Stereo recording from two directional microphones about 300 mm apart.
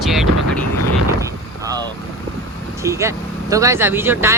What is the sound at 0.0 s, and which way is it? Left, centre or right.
Vehicle, centre.